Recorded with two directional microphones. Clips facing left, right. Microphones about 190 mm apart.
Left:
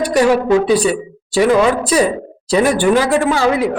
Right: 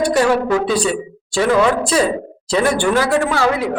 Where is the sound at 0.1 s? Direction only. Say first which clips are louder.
Left 3 dB; 15° left (ahead or behind).